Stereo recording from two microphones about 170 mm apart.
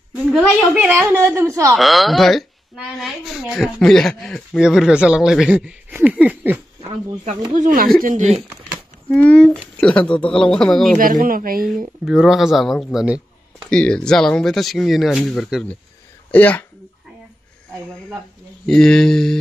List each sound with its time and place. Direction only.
0.1 s a woman's voice: 5° right (ahead or behind)
1.8 s a woman's voice: centre (ahead or behind)
7.2 s speech: 50° right (ahead or behind)
9.1 s a woman's voice: 5° left (ahead or behind)
11.0 s a woman's voice: 55° right (ahead or behind)
12.0 s a woman's voice: 5° right (ahead or behind)
18.7 s a woman's voice: 5° left (ahead or behind)